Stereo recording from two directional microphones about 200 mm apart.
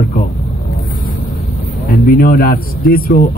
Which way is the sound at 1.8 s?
45° left (ahead or behind).